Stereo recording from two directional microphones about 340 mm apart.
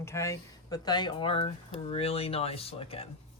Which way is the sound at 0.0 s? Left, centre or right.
Centre.